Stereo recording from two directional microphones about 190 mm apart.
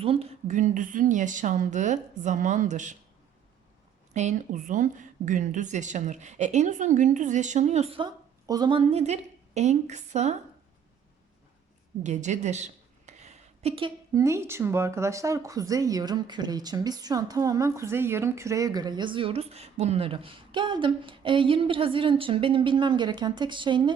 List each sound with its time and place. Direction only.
0.0 s a woman's voice: 30° right (ahead or behind)
4.1 s a woman's voice: 40° right (ahead or behind)
12.0 s a woman's voice: 40° right (ahead or behind)